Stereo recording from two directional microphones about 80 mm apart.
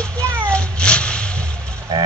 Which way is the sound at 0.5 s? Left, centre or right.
Centre.